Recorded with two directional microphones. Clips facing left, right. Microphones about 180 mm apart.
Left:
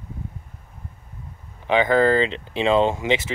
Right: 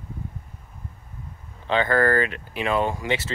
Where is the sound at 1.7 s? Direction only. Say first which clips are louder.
Left 3 dB; 15° left (ahead or behind).